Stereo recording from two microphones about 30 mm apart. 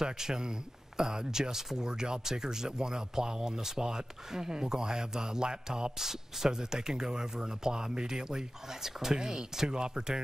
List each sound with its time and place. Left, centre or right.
0.0 s speech: right
5.9 s speech: centre